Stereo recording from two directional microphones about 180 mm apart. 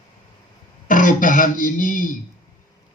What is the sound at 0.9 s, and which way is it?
Speech, 45° left (ahead or behind).